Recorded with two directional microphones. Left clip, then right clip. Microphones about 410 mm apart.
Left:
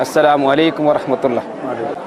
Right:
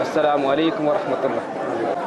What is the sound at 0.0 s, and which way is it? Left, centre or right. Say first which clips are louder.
Speech: left 6 dB; left.